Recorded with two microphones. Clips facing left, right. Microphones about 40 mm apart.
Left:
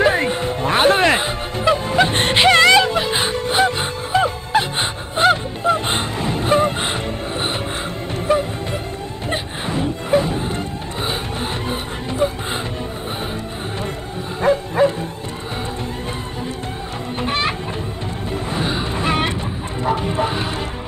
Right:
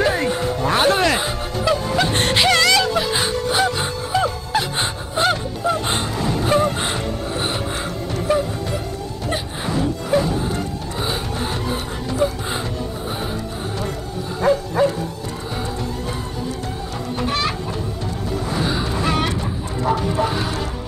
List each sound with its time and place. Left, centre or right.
0.0 s music: left
14.4 s bow-wow: left
17.2 s chicken: left
18.5 s a sound: left